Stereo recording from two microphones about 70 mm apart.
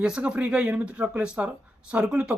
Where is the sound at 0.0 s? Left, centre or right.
Centre.